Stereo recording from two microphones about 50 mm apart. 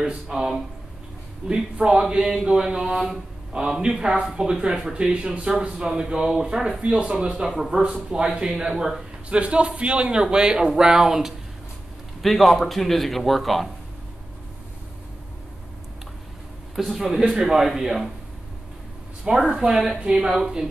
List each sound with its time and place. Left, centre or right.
0.0 s a man's voice: centre
12.2 s a man's voice: centre
16.7 s a man's voice: centre
19.2 s speech: centre